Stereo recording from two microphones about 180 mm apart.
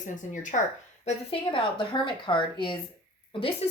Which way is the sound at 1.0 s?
30° left (ahead or behind).